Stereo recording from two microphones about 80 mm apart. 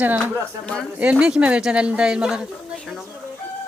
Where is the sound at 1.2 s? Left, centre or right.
Centre.